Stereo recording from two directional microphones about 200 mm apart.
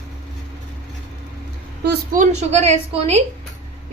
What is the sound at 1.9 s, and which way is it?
A woman's voice, 40° right (ahead or behind).